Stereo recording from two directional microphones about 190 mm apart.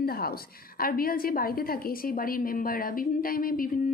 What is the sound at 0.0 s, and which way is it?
A woman's voice, 55° left (ahead or behind).